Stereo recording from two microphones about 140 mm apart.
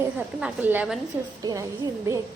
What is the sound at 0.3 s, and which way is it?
Speech, 10° right (ahead or behind).